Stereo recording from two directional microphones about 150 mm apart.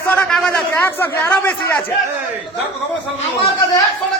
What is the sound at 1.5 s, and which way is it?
Speech, 20° left (ahead or behind).